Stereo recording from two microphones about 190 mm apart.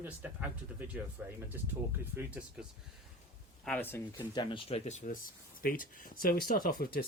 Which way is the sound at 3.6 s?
10° left (ahead or behind).